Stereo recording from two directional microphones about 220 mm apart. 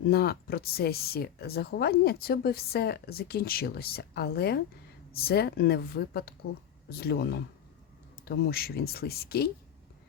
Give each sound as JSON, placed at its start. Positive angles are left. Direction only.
{"t": 0.1, "sound": "speech", "side_deg": 45}